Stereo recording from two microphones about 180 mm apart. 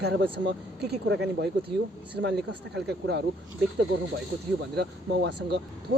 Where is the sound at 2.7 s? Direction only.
70° right (ahead or behind).